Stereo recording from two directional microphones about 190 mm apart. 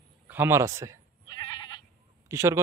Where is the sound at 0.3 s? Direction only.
10° right (ahead or behind).